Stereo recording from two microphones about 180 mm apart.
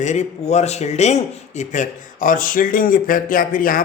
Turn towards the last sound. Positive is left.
turn(degrees=50)  # may be behind; listen again after turning